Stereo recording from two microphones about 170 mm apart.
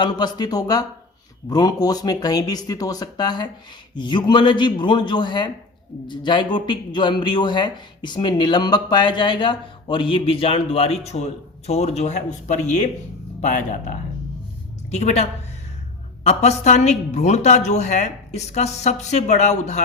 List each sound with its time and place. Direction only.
0.0 s a woman's voice: 25° left (ahead or behind); by 19.8 s 40° left (ahead or behind)